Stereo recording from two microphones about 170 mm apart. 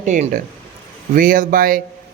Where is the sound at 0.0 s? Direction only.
45° right (ahead or behind).